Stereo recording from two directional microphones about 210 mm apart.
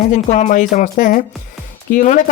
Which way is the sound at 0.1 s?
35° left (ahead or behind).